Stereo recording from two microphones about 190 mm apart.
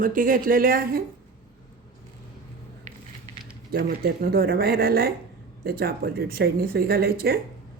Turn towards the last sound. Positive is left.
turn(degrees=-50)  # may be behind; listen again after turning